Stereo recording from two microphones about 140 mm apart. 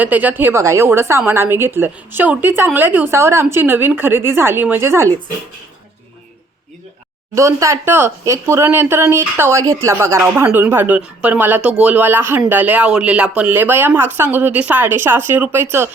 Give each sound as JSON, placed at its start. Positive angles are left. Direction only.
{"t": 0.0, "sound": "speech", "side_deg": -10}
{"t": 7.3, "sound": "speech", "side_deg": -20}